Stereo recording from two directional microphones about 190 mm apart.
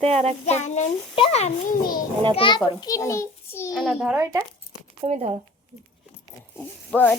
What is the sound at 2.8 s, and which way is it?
Speech, 15° left (ahead or behind).